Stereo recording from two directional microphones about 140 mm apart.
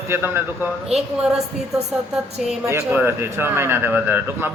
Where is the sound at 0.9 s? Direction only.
45° right (ahead or behind).